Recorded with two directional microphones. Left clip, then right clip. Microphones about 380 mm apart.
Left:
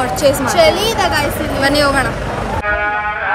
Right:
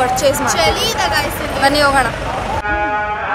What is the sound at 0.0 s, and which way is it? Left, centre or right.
Speech, centre.